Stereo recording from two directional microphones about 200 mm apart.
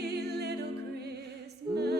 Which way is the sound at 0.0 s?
55° right (ahead or behind).